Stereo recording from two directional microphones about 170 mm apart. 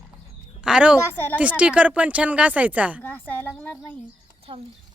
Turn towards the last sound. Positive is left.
turn(degrees=-35)  # may be behind; listen again after turning